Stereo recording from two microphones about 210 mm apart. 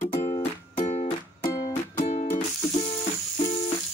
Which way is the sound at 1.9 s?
35° left (ahead or behind).